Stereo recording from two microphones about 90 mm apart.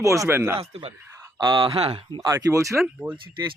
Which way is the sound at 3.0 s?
25° right (ahead or behind).